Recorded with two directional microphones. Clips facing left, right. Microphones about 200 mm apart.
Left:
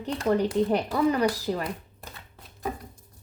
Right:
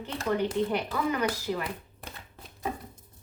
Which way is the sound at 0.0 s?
35° left (ahead or behind).